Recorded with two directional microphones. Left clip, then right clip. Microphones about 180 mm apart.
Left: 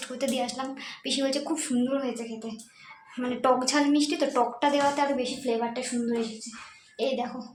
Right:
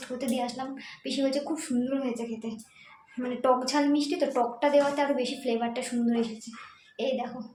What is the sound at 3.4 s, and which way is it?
A woman's voice, 10° left (ahead or behind).